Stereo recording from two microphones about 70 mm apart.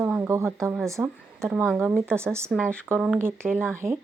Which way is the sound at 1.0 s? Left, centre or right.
Centre.